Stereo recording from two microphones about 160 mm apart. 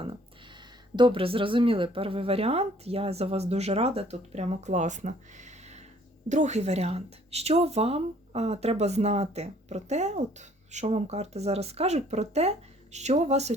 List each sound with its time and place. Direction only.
0.9 s speech: 30° right (ahead or behind)